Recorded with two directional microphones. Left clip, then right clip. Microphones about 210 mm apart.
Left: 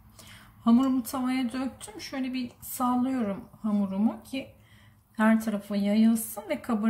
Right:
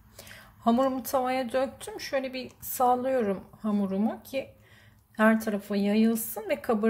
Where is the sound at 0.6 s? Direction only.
35° right (ahead or behind).